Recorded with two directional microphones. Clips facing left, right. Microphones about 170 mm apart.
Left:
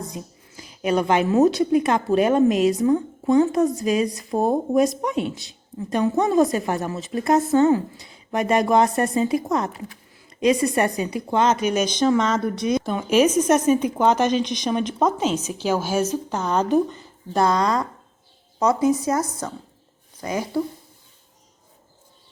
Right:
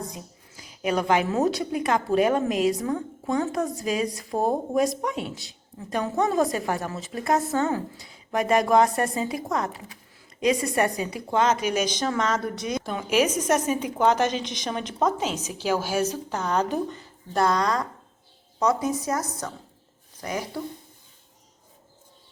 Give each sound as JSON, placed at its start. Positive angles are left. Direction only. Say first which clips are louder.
{"t": 0.8, "sound": "a woman's voice", "louder": "left 3 dB", "side_deg": 25}
{"t": 10.8, "sound": "a woman's voice", "louder": "left 3 dB", "side_deg": 25}